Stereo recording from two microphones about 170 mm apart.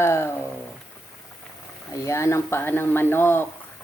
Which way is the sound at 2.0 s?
15° left (ahead or behind).